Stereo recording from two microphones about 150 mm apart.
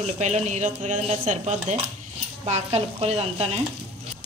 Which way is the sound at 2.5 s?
45° right (ahead or behind).